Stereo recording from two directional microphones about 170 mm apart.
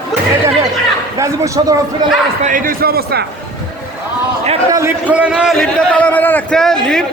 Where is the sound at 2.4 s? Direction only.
55° right (ahead or behind).